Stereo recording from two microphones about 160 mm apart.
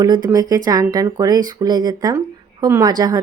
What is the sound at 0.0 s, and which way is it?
Speech, 25° right (ahead or behind).